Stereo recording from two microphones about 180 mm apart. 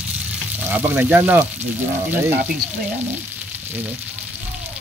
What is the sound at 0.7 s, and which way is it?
Speech, 10° right (ahead or behind).